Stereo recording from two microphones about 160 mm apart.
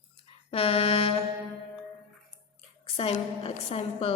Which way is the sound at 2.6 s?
35° left (ahead or behind).